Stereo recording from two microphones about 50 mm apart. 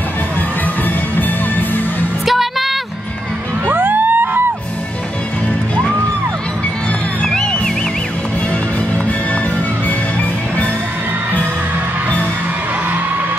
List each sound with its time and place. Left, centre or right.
2.2 s music: centre
3.7 s music: right
7.2 s music: centre